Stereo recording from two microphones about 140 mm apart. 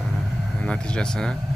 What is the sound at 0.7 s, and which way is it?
Speech, 5° left (ahead or behind).